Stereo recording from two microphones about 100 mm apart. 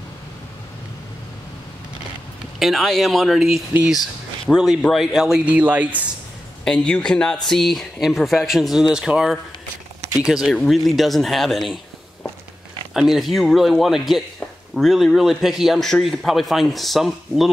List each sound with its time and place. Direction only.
2.6 s a man's voice: centre (ahead or behind)
5.4 s speech: 15° right (ahead or behind)
6.6 s a man's voice: 10° left (ahead or behind)
12.9 s a man's voice: 5° right (ahead or behind)